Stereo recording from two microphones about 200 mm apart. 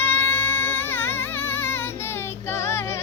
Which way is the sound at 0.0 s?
10° left (ahead or behind).